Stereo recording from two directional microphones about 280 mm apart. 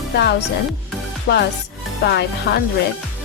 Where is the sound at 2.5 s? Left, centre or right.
Left.